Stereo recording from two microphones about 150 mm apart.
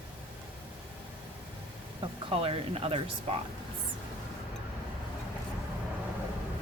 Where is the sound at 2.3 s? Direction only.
40° right (ahead or behind).